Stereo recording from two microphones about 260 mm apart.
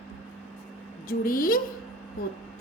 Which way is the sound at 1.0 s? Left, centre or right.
Left.